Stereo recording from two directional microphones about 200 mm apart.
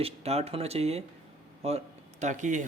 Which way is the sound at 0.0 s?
30° right (ahead or behind).